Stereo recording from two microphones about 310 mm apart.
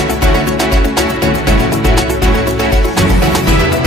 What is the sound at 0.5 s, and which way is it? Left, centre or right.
Music, centre.